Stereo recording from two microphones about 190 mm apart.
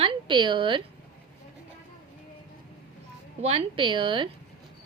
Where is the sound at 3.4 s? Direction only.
30° right (ahead or behind).